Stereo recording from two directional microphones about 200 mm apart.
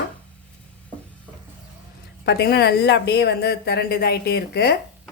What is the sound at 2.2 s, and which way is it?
A woman's voice, 55° left (ahead or behind).